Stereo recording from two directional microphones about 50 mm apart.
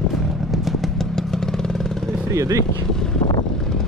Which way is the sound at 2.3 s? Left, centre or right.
Right.